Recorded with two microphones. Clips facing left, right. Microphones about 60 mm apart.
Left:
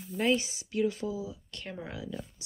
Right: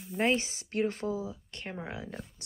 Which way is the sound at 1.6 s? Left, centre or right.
Right.